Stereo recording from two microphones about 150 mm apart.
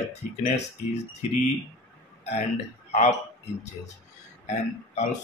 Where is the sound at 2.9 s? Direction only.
45° left (ahead or behind).